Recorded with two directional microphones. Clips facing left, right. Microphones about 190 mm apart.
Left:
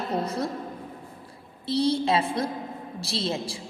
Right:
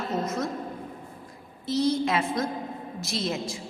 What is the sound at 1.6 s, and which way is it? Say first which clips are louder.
A woman's voice: left 1 dB; 30° left (ahead or behind).